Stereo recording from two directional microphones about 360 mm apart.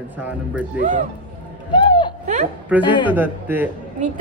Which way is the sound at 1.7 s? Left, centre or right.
Centre.